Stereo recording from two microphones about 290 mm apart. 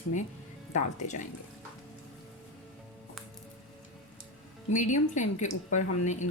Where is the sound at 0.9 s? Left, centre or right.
Left.